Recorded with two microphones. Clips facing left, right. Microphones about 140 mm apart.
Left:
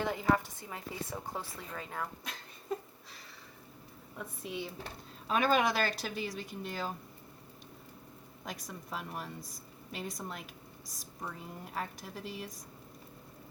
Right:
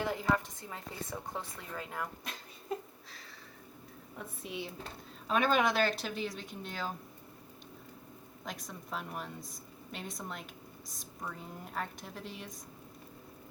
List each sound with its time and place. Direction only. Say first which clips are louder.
0.0 s speech: left 2 dB; centre (ahead or behind)
4.2 s speech: left 1 dB; centre (ahead or behind)
8.4 s speech: even; 5° left (ahead or behind)